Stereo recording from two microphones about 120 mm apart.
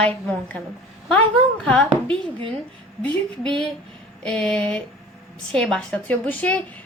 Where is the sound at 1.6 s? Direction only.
10° left (ahead or behind).